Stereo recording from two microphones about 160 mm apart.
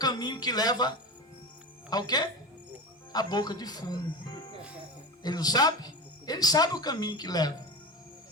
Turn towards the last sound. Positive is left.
turn(degrees=25)  # may be behind; listen again after turning